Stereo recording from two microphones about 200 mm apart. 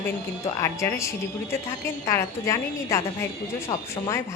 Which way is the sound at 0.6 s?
15° left (ahead or behind).